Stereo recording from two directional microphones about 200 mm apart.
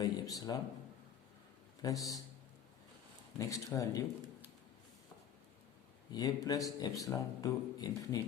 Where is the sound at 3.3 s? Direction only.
15° left (ahead or behind).